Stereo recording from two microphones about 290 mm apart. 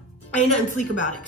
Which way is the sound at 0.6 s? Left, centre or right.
Left.